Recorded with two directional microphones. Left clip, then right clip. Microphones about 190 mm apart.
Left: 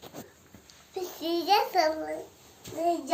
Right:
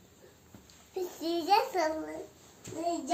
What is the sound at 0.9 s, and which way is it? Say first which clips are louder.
A child's voice: left 2 dB; 15° right (ahead or behind).